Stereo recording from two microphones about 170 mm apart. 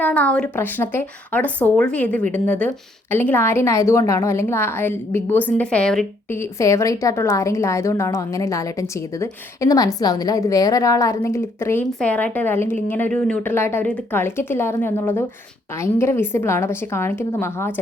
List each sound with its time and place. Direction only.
0.0 s speech: 10° left (ahead or behind)
6.4 s a woman's voice: 15° left (ahead or behind)